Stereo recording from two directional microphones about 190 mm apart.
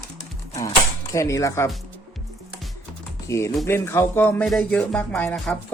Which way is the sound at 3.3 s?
15° left (ahead or behind).